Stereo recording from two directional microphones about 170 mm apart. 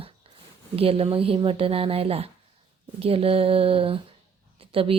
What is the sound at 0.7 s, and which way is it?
Speech, 35° right (ahead or behind).